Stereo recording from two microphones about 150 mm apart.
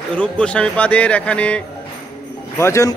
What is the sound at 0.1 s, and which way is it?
Speech, 5° left (ahead or behind).